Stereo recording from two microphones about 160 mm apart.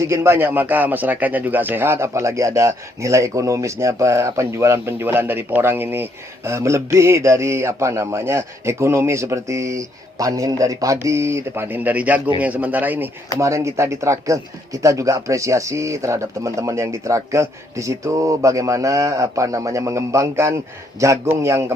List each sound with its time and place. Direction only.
0.0 s speech: 15° right (ahead or behind)